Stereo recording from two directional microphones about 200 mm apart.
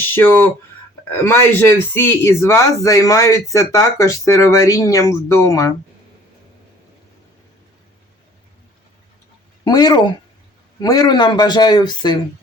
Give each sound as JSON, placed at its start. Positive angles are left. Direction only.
{"t": 0.1, "sound": "a man's voice", "side_deg": 10}
{"t": 9.6, "sound": "a man's voice", "side_deg": 20}